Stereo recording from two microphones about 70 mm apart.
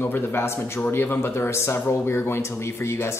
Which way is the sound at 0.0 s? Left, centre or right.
Left.